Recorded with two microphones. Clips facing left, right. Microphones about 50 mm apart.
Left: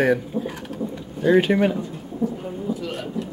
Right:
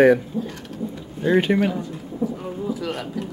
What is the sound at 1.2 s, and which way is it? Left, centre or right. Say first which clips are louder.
Speech: left 2 dB; centre.